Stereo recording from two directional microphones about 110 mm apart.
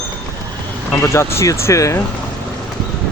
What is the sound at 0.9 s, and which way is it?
Speech, 25° left (ahead or behind).